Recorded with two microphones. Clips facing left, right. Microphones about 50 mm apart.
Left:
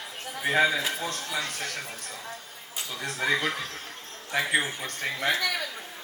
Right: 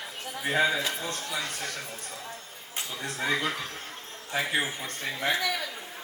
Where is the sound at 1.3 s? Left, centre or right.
Left.